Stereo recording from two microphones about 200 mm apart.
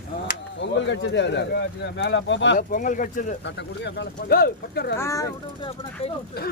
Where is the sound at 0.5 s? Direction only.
65° left (ahead or behind).